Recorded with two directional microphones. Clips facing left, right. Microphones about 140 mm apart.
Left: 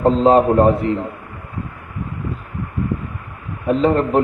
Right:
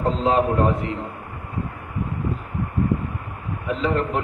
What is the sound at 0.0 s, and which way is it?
Speech, 40° left (ahead or behind).